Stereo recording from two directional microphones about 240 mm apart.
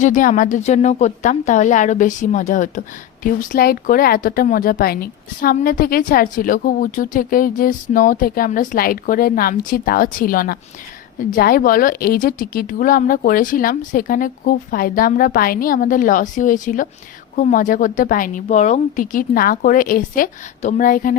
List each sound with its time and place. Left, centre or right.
0.0 s a woman's voice: left